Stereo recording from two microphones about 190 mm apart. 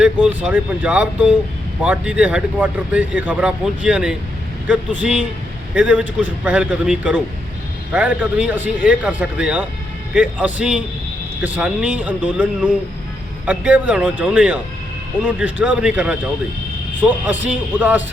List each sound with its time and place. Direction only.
0.0 s speech: 5° right (ahead or behind)